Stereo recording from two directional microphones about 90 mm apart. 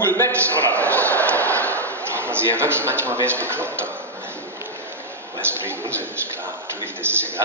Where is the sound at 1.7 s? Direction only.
25° right (ahead or behind).